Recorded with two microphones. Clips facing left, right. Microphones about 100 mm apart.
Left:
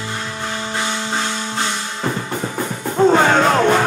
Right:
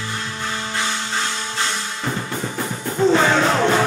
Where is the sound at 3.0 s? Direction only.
45° left (ahead or behind).